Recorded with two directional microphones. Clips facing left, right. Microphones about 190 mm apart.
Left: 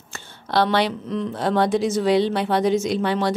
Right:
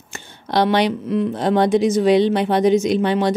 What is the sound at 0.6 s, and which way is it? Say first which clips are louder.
Speech: right 3 dB; 15° right (ahead or behind).